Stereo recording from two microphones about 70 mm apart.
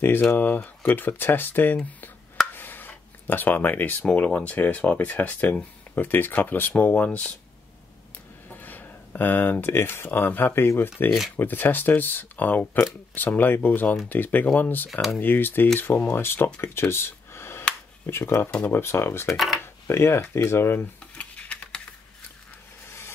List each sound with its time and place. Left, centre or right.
0.0 s speech: left
8.5 s speech: left
11.1 s speech: centre
11.3 s speech: left
16.6 s a sound: left
18.0 s speech: left
19.3 s speech: centre
19.6 s a sound: left
20.4 s speech: left
21.1 s a sound: centre
22.8 s vehicle: left